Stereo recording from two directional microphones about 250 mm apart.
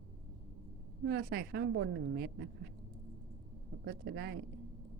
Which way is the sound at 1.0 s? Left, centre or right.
Right.